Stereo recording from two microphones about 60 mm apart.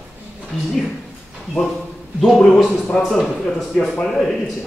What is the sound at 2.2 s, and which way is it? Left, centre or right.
Speech, centre.